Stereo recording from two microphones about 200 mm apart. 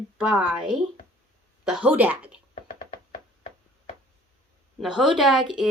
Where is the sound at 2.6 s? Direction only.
40° left (ahead or behind).